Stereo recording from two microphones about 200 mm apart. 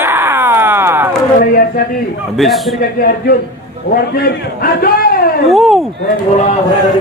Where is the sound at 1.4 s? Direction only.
45° left (ahead or behind).